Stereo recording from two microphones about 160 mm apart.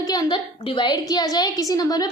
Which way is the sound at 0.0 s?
25° left (ahead or behind).